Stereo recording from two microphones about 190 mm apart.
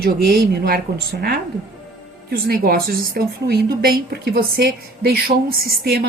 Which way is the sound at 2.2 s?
50° right (ahead or behind).